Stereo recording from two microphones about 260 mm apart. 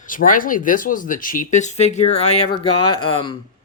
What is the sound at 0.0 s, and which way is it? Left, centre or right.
Speech, left.